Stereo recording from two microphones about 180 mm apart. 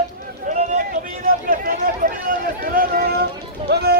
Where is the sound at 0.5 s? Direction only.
40° right (ahead or behind).